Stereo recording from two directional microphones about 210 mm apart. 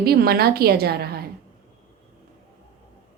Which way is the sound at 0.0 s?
45° right (ahead or behind).